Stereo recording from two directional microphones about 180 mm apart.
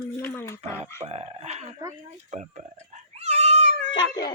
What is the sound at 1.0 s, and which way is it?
Speech, 35° right (ahead or behind).